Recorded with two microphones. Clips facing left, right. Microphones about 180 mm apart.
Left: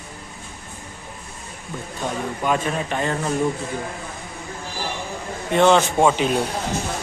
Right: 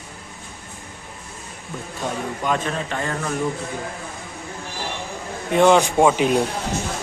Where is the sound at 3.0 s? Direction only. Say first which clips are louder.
Left 2 dB; 25° left (ahead or behind).